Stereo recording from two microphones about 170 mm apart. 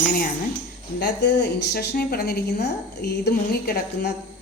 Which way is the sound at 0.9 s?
90° left.